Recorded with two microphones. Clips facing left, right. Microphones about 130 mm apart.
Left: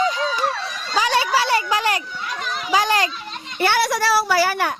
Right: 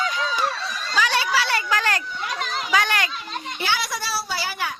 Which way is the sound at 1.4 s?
20° left (ahead or behind).